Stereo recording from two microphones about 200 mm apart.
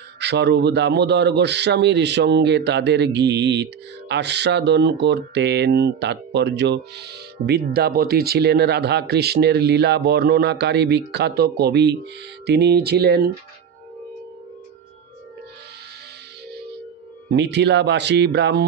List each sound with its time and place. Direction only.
0.2 s speech: 60° right (ahead or behind)
17.3 s speech: 60° right (ahead or behind)